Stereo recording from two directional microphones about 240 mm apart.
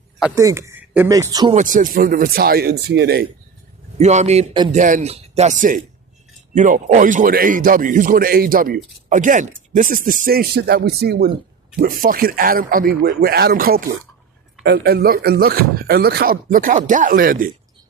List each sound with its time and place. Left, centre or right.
0.2 s speech: centre
1.5 s speech: right
3.9 s a man's voice: right